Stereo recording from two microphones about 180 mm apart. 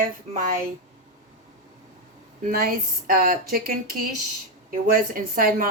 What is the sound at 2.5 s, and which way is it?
Speech, 55° right (ahead or behind).